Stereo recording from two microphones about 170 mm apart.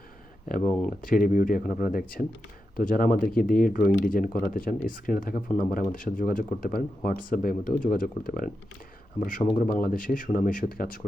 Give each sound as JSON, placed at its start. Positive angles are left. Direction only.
{"t": 0.9, "sound": "speech", "side_deg": 55}